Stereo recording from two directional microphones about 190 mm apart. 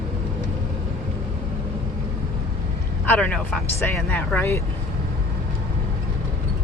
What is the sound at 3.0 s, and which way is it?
Speech, 10° left (ahead or behind).